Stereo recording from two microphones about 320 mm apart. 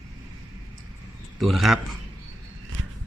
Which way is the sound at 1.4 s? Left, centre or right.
Centre.